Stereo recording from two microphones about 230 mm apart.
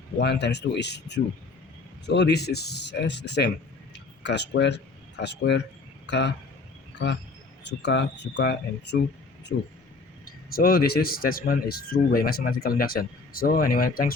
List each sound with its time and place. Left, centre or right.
0.2 s speech: left
7.7 s speech: left
10.2 s speech: left